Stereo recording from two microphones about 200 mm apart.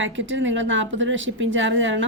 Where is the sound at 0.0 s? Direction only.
70° right (ahead or behind).